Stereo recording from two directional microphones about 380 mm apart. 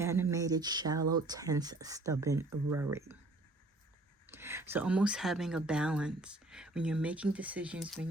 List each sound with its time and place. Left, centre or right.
0.0 s speech: centre
4.3 s speech: centre